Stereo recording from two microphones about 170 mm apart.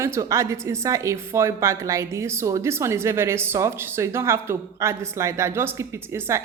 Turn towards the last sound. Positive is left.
turn(degrees=-15)  # may be behind; listen again after turning